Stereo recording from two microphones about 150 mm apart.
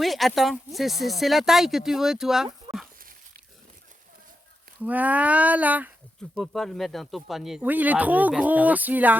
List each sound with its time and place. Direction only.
0.0 s speech: centre (ahead or behind)
2.7 s a sound: 25° right (ahead or behind)
4.8 s speech: 10° right (ahead or behind)
6.3 s speech: centre (ahead or behind)